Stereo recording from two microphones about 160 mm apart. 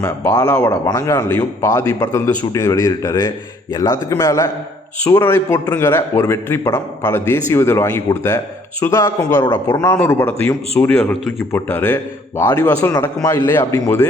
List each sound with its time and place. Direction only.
0.0 s a man's voice: 15° left (ahead or behind)